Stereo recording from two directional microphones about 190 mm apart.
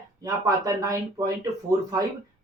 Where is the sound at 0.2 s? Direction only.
15° right (ahead or behind).